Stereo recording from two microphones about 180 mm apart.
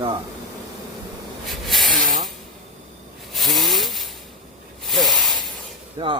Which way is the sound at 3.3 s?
Centre (ahead or behind).